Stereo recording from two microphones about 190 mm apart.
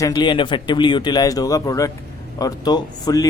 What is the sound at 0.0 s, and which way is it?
A man's voice, 25° left (ahead or behind).